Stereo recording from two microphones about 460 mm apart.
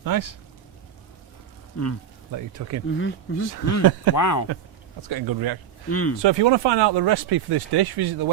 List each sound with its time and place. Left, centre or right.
0.0 s speech: right
1.7 s speech: left
2.3 s speech: right
3.0 s speech: left
5.0 s speech: right
5.9 s speech: left
6.2 s speech: right